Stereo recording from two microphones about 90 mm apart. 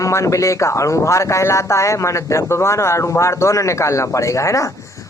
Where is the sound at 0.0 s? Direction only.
35° left (ahead or behind).